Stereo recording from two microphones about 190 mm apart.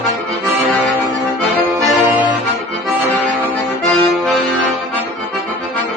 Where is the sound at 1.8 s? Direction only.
15° right (ahead or behind).